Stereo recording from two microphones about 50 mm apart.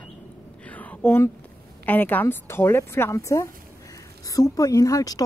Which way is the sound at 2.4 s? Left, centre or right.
Left.